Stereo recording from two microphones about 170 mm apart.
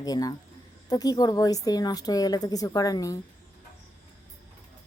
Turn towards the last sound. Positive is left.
turn(degrees=20)  # may be behind; listen again after turning